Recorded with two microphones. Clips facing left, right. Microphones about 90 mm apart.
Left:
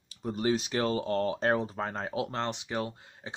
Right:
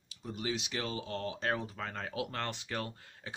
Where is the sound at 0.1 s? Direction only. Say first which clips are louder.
Left 8 dB; 40° left (ahead or behind).